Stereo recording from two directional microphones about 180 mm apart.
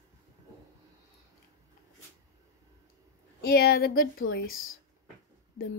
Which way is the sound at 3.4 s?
60° left (ahead or behind).